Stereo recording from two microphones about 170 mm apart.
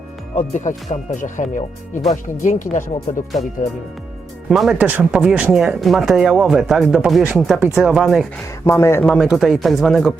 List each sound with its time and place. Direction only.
0.3 s speech: 45° left (ahead or behind)
4.4 s speech: centre (ahead or behind)
8.6 s speech: 15° left (ahead or behind)
9.0 s speech: centre (ahead or behind)